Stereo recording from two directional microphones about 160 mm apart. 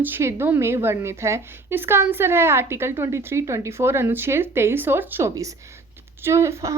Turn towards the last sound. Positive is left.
turn(degrees=-20)  # may be behind; listen again after turning